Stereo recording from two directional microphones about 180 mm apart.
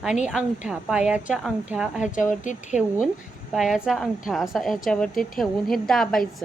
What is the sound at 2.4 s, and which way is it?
Speech, 45° left (ahead or behind).